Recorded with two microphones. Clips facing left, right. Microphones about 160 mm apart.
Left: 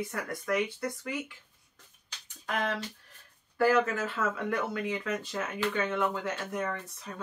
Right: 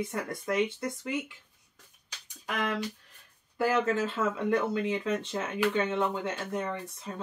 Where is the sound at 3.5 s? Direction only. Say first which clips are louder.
Left 1 dB; 20° right (ahead or behind).